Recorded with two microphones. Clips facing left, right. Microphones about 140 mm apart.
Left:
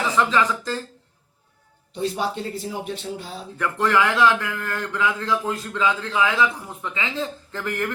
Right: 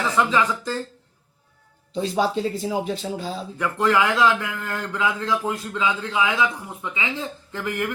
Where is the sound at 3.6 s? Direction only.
20° right (ahead or behind).